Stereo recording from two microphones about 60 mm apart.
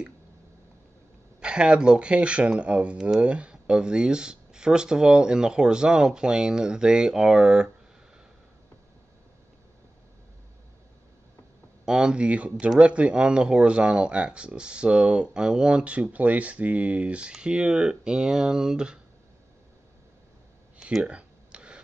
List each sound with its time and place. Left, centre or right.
1.4 s speech: centre
11.8 s speech: centre
21.0 s a sound: centre